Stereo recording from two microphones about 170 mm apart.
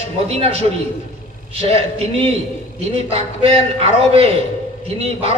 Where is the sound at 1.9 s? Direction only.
35° right (ahead or behind).